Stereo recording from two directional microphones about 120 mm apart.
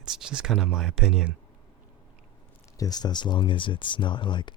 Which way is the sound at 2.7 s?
30° left (ahead or behind).